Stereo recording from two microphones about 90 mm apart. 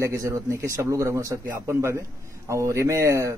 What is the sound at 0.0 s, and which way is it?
A man's voice, 35° right (ahead or behind).